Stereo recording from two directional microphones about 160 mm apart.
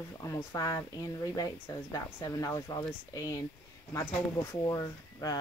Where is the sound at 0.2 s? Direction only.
20° left (ahead or behind).